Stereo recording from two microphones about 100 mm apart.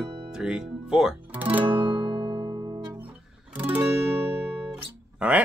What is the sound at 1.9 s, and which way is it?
Music, 65° right (ahead or behind).